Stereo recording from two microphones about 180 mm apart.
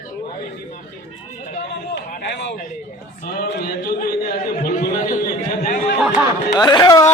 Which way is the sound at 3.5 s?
60° left (ahead or behind).